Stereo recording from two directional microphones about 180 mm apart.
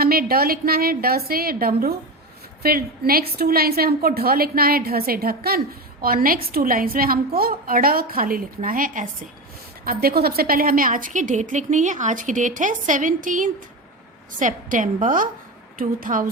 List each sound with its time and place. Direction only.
0.0 s a woman's voice: 55° right (ahead or behind)